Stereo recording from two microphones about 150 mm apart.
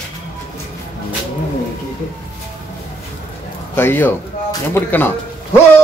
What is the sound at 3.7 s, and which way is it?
Speech, 15° left (ahead or behind).